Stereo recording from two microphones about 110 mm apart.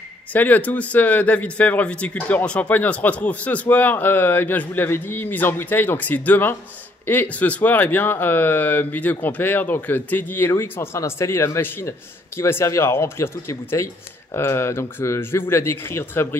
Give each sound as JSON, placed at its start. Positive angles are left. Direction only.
{"t": 0.3, "sound": "speech", "side_deg": 15}